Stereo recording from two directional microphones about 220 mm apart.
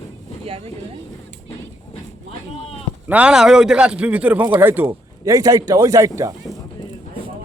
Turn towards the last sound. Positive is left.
turn(degrees=-15)  # may be behind; listen again after turning